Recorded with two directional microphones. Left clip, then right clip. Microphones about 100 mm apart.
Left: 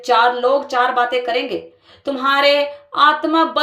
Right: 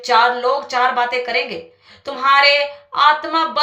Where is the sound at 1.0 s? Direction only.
55° left (ahead or behind).